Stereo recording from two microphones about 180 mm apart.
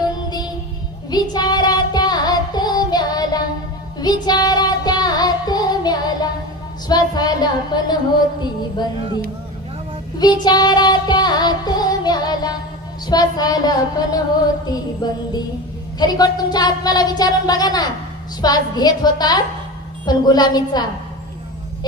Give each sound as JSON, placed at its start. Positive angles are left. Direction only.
{"t": 0.0, "sound": "music", "side_deg": 25}
{"t": 6.8, "sound": "speech", "side_deg": 20}
{"t": 10.2, "sound": "music", "side_deg": 25}
{"t": 13.1, "sound": "speech", "side_deg": 20}